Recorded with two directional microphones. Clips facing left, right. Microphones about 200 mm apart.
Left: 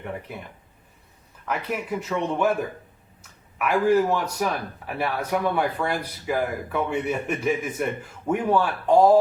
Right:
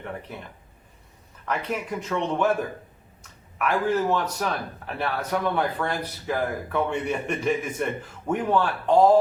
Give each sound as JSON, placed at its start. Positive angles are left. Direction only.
{"t": 1.5, "sound": "a man's voice", "side_deg": 5}